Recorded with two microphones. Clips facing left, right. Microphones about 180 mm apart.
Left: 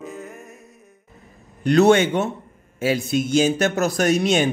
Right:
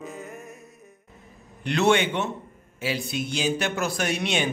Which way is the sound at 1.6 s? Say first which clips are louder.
Left 7 dB; 40° left (ahead or behind).